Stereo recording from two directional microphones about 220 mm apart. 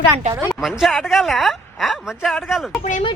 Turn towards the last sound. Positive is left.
turn(degrees=30)  # may be behind; listen again after turning